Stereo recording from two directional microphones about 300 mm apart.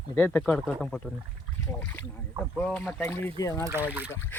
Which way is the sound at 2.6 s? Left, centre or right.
Centre.